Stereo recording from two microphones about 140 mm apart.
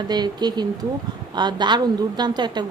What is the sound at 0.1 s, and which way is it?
A woman's voice, 30° right (ahead or behind).